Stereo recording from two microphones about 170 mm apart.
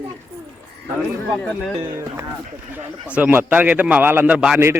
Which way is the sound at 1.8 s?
15° right (ahead or behind).